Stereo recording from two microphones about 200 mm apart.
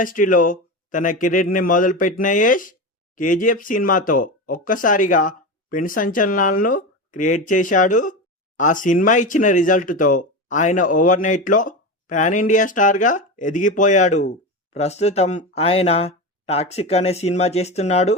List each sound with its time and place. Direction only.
0.0 s speech: 40° left (ahead or behind)